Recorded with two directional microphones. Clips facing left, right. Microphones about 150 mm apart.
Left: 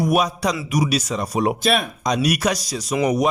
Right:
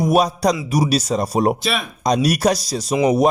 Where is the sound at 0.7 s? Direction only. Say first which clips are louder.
Right 3 dB; 35° right (ahead or behind).